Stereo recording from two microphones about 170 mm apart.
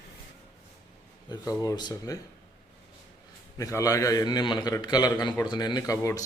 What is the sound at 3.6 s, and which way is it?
A man's voice, 20° left (ahead or behind).